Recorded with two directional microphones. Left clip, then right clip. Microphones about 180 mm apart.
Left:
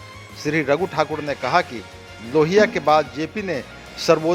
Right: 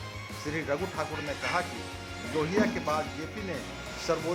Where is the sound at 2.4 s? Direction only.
50° left (ahead or behind).